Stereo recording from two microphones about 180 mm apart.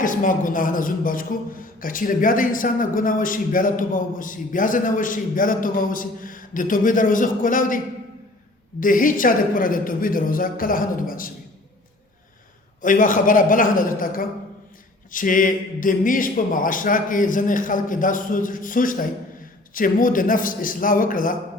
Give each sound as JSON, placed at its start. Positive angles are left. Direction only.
{"t": 0.0, "sound": "a man's voice", "side_deg": 45}
{"t": 8.8, "sound": "a man's voice", "side_deg": 50}
{"t": 12.8, "sound": "a man's voice", "side_deg": 45}